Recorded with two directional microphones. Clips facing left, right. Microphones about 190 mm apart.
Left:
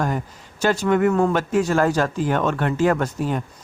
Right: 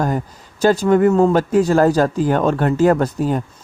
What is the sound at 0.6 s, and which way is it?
A man's voice, 35° right (ahead or behind).